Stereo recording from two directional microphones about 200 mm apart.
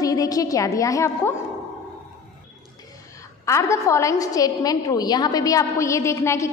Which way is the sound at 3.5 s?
15° left (ahead or behind).